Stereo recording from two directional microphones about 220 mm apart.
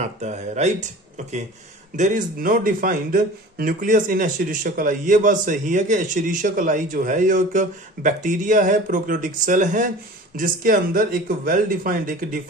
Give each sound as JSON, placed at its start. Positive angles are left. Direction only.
{"t": 0.0, "sound": "speech", "side_deg": -30}